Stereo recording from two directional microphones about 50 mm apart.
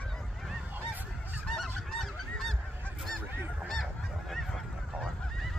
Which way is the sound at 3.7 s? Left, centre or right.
Centre.